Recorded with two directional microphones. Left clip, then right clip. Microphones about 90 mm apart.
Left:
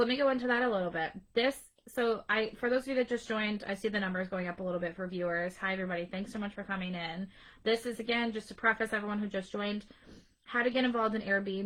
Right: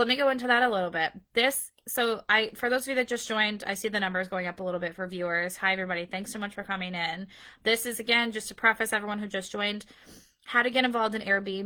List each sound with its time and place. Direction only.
0.0 s a woman's voice: 20° right (ahead or behind)